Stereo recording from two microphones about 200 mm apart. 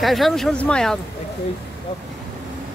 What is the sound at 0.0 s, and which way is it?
Speech, centre (ahead or behind).